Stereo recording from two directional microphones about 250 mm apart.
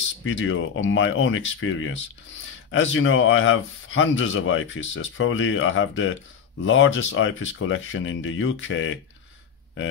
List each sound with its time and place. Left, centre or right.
0.2 s speech: left